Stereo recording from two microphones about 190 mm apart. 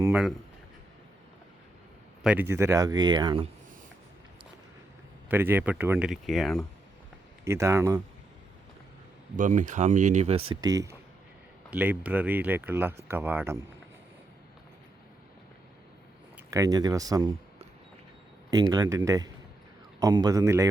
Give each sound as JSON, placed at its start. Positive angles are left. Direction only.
{"t": 0.0, "sound": "speech", "side_deg": -5}
{"t": 2.2, "sound": "speech", "side_deg": -10}
{"t": 5.3, "sound": "speech", "side_deg": -10}
{"t": 7.4, "sound": "speech", "side_deg": -15}
{"t": 9.3, "sound": "speech", "side_deg": -45}
{"t": 16.5, "sound": "speech", "side_deg": -20}
{"t": 18.5, "sound": "speech", "side_deg": -20}